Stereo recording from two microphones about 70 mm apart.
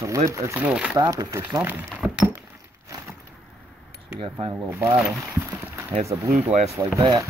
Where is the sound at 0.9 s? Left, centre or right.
Right.